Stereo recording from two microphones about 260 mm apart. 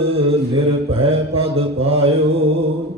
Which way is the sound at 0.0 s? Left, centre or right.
Right.